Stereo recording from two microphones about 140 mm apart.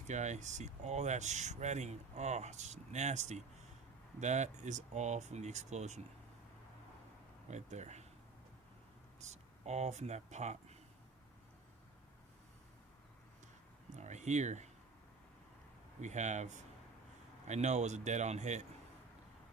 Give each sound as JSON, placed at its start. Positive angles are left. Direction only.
{"t": 0.1, "sound": "speech", "side_deg": -55}
{"t": 7.5, "sound": "speech", "side_deg": -55}
{"t": 9.2, "sound": "speech", "side_deg": -55}
{"t": 13.9, "sound": "a sound", "side_deg": -55}
{"t": 16.0, "sound": "speech", "side_deg": -55}